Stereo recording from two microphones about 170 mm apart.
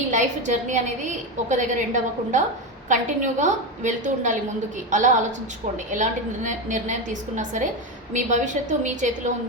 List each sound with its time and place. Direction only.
0.1 s a woman's voice: 45° right (ahead or behind)